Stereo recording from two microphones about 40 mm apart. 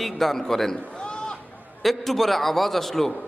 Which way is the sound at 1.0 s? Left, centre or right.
Left.